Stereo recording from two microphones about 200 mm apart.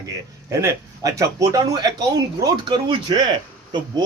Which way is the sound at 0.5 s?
15° right (ahead or behind).